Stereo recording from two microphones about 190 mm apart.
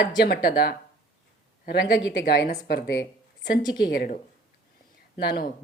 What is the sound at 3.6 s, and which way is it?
Speech, 20° left (ahead or behind).